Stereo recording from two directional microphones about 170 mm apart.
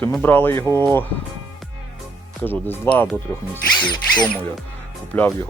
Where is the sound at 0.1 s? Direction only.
10° left (ahead or behind).